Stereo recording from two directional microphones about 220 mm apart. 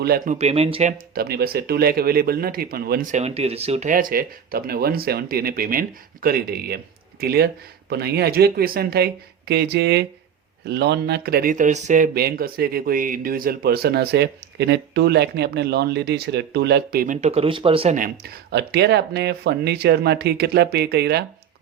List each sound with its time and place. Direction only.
0.0 s speech: 45° right (ahead or behind)
0.3 s speech: 30° right (ahead or behind); by 21.2 s 45° right (ahead or behind)